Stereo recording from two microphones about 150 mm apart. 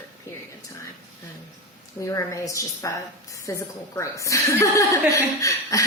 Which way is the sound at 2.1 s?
20° left (ahead or behind).